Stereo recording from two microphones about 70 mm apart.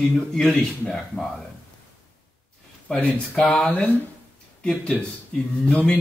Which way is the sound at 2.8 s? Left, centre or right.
Centre.